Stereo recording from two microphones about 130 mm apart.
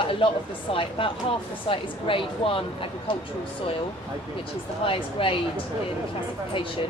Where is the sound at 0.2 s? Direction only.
40° left (ahead or behind).